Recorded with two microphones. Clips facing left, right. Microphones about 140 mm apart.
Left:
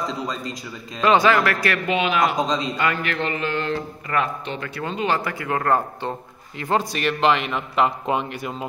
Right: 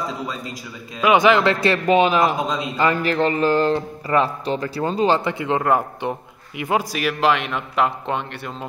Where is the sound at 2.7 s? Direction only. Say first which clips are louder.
Right 5 dB; 30° right (ahead or behind).